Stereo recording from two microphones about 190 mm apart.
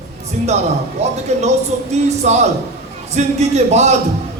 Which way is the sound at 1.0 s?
35° right (ahead or behind).